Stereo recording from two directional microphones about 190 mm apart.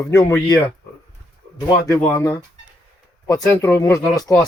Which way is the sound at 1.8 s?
15° left (ahead or behind).